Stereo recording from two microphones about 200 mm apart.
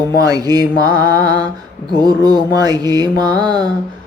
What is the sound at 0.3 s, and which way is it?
Mantra, 20° right (ahead or behind).